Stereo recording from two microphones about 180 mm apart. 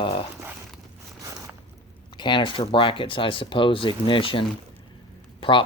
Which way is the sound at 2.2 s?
25° left (ahead or behind).